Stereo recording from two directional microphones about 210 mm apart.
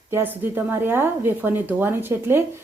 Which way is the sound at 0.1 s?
10° right (ahead or behind).